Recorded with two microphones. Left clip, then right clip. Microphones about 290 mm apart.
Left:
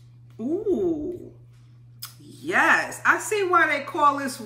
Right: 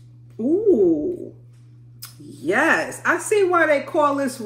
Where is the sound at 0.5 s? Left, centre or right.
Centre.